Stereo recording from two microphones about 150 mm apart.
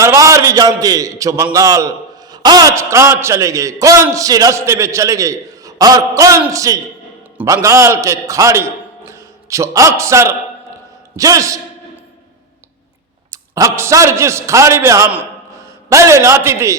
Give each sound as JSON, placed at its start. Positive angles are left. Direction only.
{"t": 0.0, "sound": "a man's voice", "side_deg": -20}
{"t": 13.3, "sound": "a man's voice", "side_deg": -20}